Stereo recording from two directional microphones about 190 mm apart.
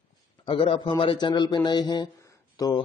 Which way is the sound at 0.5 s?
25° left (ahead or behind).